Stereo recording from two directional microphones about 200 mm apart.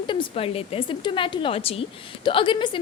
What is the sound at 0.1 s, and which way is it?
A woman's voice, 25° left (ahead or behind).